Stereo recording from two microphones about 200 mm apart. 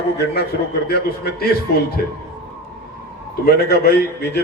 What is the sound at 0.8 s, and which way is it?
A man's voice, 50° left (ahead or behind).